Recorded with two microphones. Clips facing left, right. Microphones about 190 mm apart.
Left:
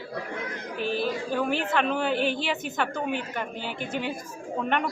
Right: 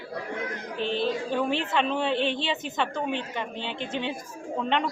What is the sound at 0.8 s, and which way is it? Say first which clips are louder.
A woman's voice: right 1 dB; 25° right (ahead or behind).